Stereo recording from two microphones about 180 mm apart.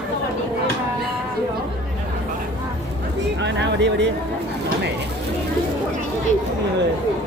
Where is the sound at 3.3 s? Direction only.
80° right.